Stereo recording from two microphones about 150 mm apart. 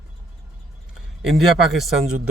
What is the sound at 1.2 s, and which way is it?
Speech, centre (ahead or behind).